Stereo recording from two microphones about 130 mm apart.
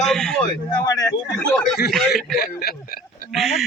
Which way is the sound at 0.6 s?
30° left (ahead or behind).